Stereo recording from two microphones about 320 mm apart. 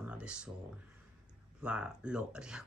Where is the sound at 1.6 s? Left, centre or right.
Centre.